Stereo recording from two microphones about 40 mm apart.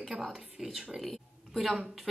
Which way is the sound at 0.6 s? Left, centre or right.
Right.